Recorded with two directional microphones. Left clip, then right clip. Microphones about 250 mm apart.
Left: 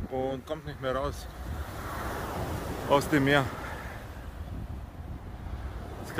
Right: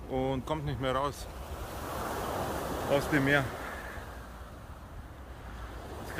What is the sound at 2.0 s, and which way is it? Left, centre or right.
Vehicle, right.